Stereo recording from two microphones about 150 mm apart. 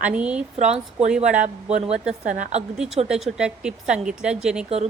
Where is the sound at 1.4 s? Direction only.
50° right (ahead or behind).